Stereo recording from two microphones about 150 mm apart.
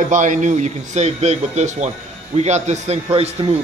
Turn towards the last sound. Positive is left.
turn(degrees=-40)  # may be behind; listen again after turning